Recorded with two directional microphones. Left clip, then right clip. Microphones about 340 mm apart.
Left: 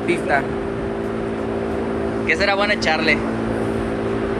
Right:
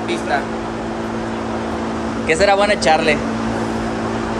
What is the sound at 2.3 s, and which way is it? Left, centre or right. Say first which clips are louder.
Speech: right 5 dB; centre.